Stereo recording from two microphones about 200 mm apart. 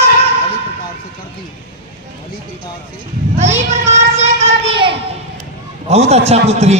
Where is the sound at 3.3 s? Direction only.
35° right (ahead or behind).